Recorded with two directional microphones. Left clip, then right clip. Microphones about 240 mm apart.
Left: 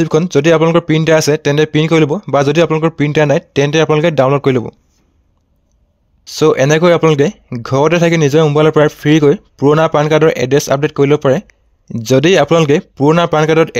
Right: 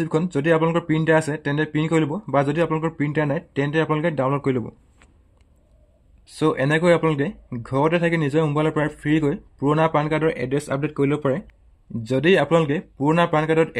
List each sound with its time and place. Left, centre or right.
0.0 s speech: left
6.2 s speech: left